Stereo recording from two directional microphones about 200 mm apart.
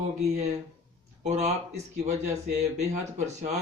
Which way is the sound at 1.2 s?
35° right (ahead or behind).